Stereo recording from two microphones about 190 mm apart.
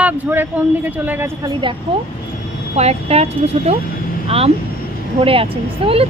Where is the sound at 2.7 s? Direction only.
35° right (ahead or behind).